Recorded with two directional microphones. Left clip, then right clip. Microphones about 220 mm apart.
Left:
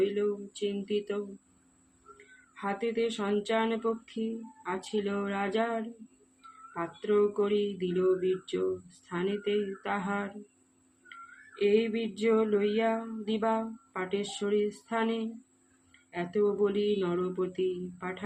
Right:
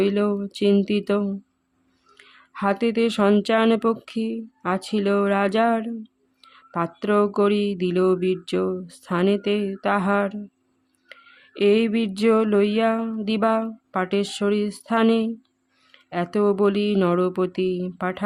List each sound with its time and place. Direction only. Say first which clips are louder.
0.0 s speech: right 7 dB; 50° right (ahead or behind)
11.5 s speech: right 7 dB; 50° right (ahead or behind)